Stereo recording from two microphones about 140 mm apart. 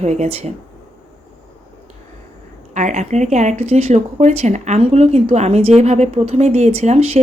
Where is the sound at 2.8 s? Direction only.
60° right (ahead or behind).